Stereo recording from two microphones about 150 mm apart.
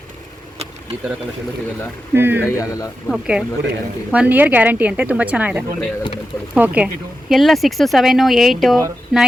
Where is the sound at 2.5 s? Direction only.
20° left (ahead or behind).